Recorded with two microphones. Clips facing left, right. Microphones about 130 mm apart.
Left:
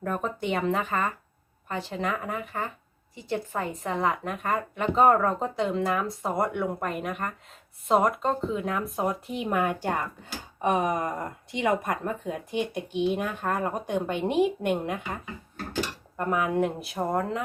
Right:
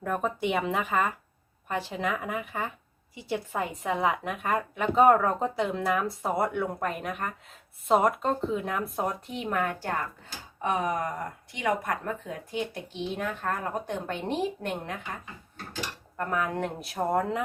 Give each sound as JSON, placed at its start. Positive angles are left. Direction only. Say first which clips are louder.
{"t": 0.0, "sound": "speech", "louder": "right 1 dB", "side_deg": -5}
{"t": 10.6, "sound": "finger snapping", "louder": "left 3 dB", "side_deg": 20}
{"t": 11.5, "sound": "speech", "louder": "left 3 dB", "side_deg": 20}
{"t": 16.1, "sound": "speech", "louder": "left 4 dB", "side_deg": 15}